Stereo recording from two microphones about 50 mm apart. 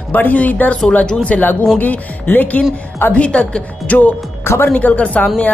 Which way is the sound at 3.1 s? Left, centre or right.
Left.